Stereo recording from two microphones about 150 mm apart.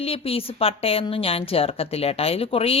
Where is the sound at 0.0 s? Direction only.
40° left (ahead or behind).